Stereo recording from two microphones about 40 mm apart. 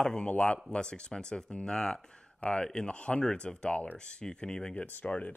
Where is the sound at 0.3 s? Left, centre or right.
Left.